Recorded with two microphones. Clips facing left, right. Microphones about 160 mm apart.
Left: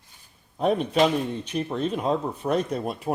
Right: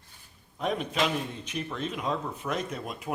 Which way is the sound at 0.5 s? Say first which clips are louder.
Left 7 dB; 35° left (ahead or behind).